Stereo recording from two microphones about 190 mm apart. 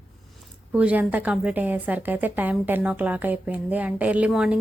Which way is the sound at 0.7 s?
5° right (ahead or behind).